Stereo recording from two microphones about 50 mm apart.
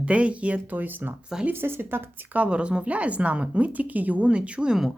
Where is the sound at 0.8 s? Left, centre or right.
Right.